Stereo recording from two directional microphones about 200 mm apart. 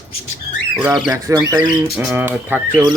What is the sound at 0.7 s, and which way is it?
Speech, 5° right (ahead or behind).